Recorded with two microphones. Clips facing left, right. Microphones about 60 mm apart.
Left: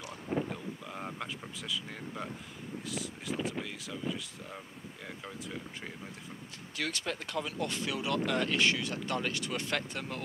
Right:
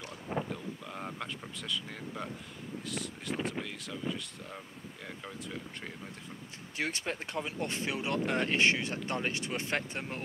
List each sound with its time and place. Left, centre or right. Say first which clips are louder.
0.5 s a sound: even; centre
2.8 s speech: even; centre
6.8 s speech: right 1 dB; right